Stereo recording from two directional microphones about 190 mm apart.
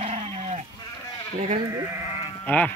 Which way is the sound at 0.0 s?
35° right (ahead or behind).